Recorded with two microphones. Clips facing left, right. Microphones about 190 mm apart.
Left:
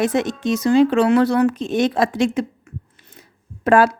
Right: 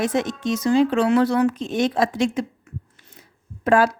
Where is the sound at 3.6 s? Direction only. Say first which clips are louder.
Left 3 dB; 65° left (ahead or behind).